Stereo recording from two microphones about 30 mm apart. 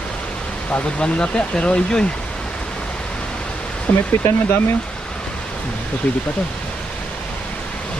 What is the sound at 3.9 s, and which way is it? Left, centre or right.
Speech, left.